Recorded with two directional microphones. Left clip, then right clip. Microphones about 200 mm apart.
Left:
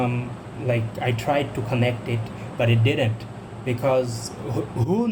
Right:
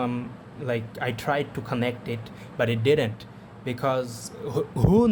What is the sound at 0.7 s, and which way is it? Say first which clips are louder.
Speech: left 3 dB; 55° right (ahead or behind).